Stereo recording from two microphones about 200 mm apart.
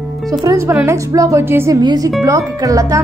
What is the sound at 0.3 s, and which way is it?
A woman's voice, 20° right (ahead or behind).